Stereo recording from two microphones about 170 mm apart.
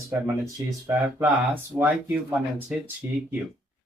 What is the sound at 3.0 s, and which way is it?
Speech, 10° right (ahead or behind).